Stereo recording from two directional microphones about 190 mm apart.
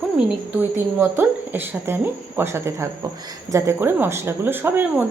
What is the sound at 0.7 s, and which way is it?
Speech, 10° right (ahead or behind).